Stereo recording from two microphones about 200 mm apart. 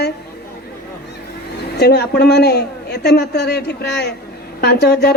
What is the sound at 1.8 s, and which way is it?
Speech, 55° left (ahead or behind).